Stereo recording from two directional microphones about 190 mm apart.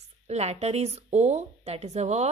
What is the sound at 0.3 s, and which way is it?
Speech, 35° right (ahead or behind).